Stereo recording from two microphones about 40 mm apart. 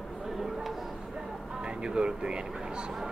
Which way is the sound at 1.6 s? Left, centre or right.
Right.